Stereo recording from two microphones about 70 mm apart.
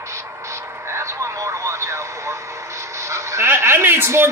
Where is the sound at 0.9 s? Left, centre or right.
Right.